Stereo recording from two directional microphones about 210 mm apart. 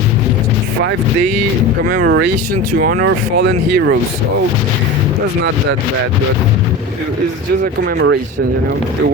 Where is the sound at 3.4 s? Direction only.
55° right (ahead or behind).